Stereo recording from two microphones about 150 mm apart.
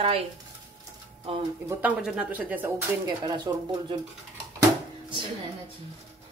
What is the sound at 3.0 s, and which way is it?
Speech, 25° right (ahead or behind).